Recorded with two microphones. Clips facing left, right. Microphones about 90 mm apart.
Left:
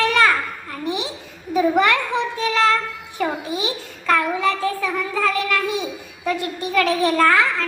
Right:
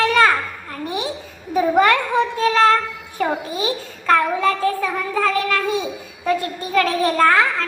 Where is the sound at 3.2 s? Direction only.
35° right (ahead or behind).